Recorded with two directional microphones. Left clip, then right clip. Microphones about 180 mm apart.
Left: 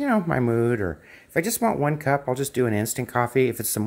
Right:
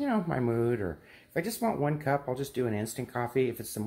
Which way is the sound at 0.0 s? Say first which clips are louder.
Left 7 dB; 30° left (ahead or behind).